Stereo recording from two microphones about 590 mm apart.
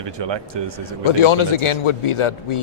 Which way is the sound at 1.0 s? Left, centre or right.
Left.